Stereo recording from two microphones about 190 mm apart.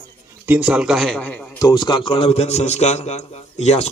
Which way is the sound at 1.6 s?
25° left (ahead or behind).